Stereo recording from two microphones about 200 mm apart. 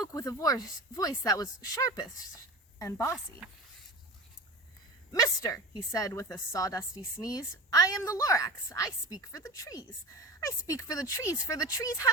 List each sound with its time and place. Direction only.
0.1 s a woman's voice: 15° left (ahead or behind)
5.1 s a woman's voice: 15° left (ahead or behind)